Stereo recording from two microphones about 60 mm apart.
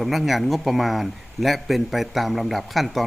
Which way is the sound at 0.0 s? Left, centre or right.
Centre.